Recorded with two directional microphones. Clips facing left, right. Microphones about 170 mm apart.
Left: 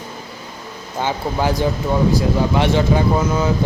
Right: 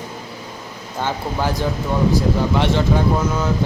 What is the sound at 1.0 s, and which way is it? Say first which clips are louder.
Speech: left 2 dB; 15° left (ahead or behind).